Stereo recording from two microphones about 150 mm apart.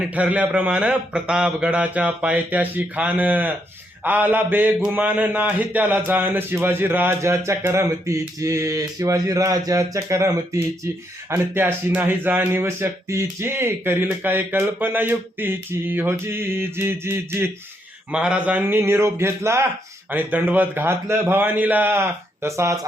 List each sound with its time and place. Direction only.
0.0 s a man's voice: 10° right (ahead or behind)